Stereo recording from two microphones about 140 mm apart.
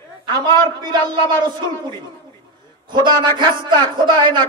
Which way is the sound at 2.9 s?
30° right (ahead or behind).